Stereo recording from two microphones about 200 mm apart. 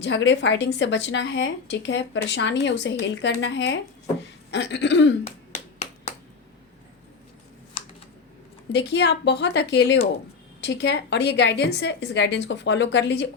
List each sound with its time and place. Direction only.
0.0 s speech: 65° left (ahead or behind)
8.7 s speech: 60° left (ahead or behind)